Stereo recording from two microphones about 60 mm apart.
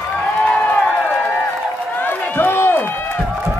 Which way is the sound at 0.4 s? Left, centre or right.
Centre.